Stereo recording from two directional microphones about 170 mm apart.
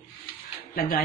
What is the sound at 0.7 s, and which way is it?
Speech, 55° left (ahead or behind).